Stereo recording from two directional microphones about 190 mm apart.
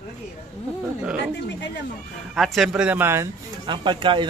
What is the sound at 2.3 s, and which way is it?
Speech, centre (ahead or behind).